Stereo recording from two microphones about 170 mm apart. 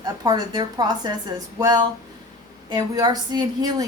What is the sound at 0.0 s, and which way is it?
Speech, 25° right (ahead or behind).